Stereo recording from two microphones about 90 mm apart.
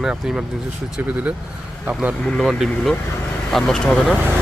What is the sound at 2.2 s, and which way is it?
Speech, centre (ahead or behind).